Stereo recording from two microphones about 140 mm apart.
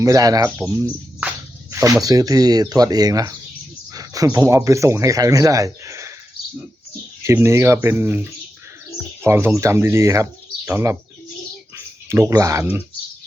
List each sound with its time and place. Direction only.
0.0 s speech: 25° right (ahead or behind)
7.2 s speech: 20° right (ahead or behind)
12.0 s speech: 20° right (ahead or behind)